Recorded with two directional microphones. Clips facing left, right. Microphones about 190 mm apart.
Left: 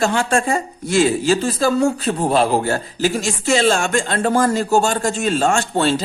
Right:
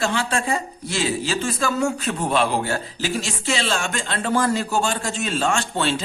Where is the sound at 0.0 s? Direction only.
45° left (ahead or behind).